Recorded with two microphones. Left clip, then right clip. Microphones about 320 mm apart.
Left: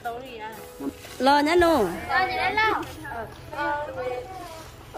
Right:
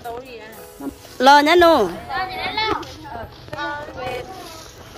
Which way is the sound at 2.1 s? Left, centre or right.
Centre.